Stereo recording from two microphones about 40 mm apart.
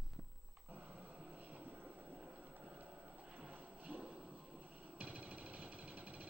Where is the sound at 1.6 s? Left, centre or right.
Right.